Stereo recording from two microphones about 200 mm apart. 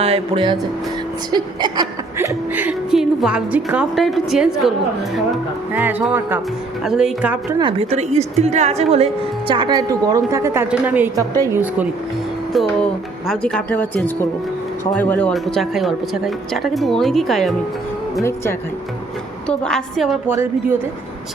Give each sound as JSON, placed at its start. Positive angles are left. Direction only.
{"t": 0.0, "sound": "a woman's voice", "side_deg": -30}
{"t": 5.7, "sound": "a woman's voice", "side_deg": -10}
{"t": 7.6, "sound": "a woman's voice", "side_deg": -30}
{"t": 12.5, "sound": "a woman's voice", "side_deg": 0}
{"t": 18.2, "sound": "a woman's voice", "side_deg": 15}
{"t": 20.3, "sound": "a woman's voice", "side_deg": -10}